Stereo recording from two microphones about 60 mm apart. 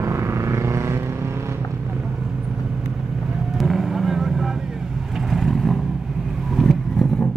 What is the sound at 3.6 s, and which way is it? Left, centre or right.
Vehicle, centre.